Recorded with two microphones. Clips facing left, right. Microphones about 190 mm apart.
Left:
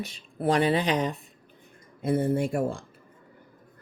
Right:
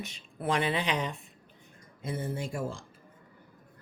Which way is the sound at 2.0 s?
55° left (ahead or behind).